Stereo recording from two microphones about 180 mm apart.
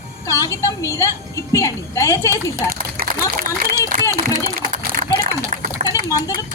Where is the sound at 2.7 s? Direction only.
55° right (ahead or behind).